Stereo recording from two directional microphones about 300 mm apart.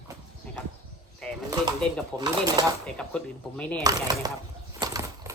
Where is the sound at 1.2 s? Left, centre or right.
Centre.